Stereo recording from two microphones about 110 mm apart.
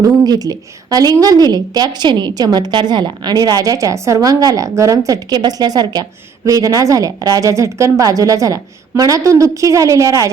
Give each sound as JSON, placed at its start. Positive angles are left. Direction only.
{"t": 0.0, "sound": "a woman's voice", "side_deg": -35}